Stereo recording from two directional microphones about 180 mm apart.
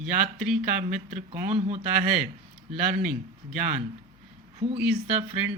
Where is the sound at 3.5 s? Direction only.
45° right (ahead or behind).